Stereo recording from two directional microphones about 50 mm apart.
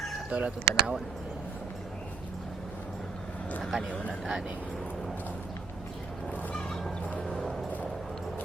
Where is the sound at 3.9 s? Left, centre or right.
Left.